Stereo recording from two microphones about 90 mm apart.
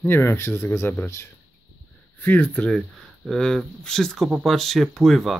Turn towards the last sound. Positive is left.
turn(degrees=0)  # may be behind; listen again after turning